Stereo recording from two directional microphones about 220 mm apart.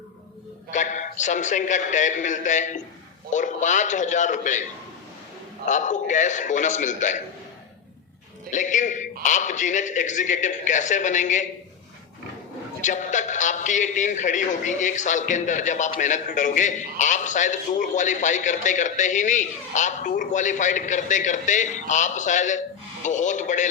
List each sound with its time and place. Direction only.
0.7 s a man's voice: 35° left (ahead or behind)
5.6 s a man's voice: 35° left (ahead or behind)
8.4 s a man's voice: 35° left (ahead or behind)
12.8 s a man's voice: 35° left (ahead or behind)